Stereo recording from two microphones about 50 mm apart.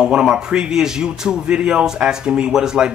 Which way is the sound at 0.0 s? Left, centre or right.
Centre.